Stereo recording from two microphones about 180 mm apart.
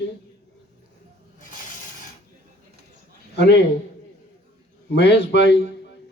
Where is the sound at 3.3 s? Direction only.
65° left (ahead or behind).